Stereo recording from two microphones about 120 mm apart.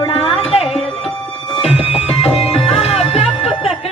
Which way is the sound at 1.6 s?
55° left (ahead or behind).